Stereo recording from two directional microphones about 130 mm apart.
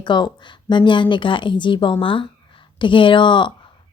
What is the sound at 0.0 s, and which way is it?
A woman's voice, 35° left (ahead or behind).